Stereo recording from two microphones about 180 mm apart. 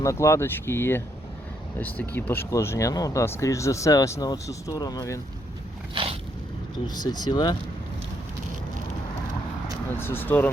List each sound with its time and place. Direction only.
0.0 s speech: 15° left (ahead or behind)
5.9 s a sound: 30° right (ahead or behind)
6.8 s speech: 25° left (ahead or behind)
10.0 s speech: 10° left (ahead or behind)